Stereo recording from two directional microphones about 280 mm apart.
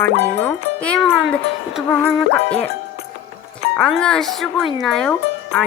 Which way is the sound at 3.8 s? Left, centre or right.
Centre.